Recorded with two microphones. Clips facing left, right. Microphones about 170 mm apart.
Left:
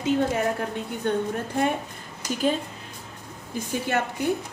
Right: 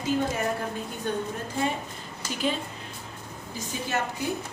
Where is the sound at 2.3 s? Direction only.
45° left (ahead or behind).